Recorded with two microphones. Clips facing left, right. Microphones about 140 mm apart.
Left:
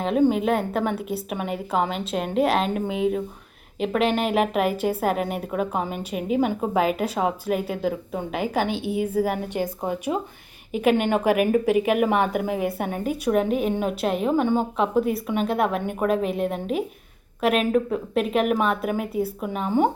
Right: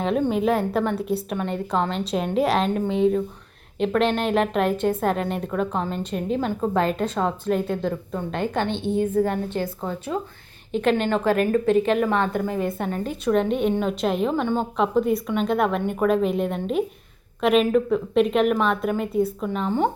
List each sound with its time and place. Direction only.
0.0 s a woman's voice: centre (ahead or behind)